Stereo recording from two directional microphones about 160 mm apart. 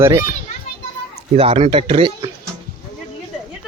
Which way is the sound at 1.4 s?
35° right (ahead or behind).